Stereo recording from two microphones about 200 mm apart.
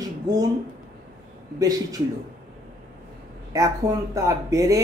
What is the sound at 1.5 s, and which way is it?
Speech, 15° right (ahead or behind).